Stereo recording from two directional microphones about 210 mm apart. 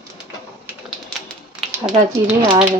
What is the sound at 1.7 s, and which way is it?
Speech, 5° right (ahead or behind).